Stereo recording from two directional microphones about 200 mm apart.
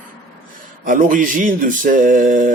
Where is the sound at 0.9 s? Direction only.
40° right (ahead or behind).